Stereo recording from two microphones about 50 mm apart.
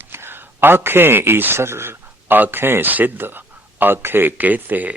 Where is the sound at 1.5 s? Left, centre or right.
Right.